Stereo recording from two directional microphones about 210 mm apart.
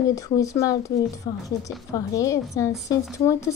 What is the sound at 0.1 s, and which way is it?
A woman's voice, 15° left (ahead or behind).